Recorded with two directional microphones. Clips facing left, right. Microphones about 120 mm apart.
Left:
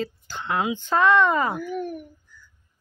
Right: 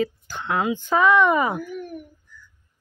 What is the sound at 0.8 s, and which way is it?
Speech, 10° right (ahead or behind).